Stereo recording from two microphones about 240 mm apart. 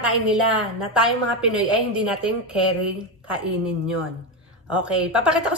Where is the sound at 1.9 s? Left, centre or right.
Centre.